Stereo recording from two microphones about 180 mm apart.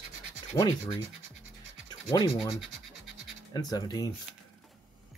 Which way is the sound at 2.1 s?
20° left (ahead or behind).